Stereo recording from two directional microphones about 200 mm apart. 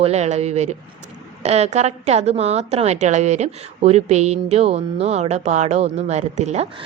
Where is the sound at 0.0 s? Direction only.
35° right (ahead or behind).